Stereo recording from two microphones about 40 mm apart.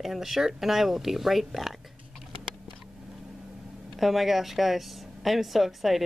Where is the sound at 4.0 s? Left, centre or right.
Centre.